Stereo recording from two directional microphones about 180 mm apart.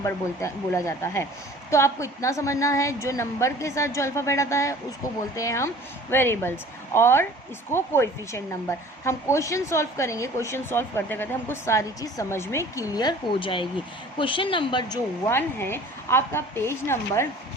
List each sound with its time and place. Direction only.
0.0 s speech: 15° left (ahead or behind)